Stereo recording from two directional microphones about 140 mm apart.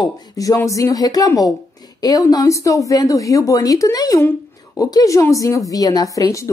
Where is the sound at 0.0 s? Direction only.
30° left (ahead or behind).